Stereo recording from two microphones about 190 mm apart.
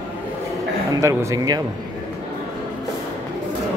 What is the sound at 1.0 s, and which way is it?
Speech, 20° right (ahead or behind).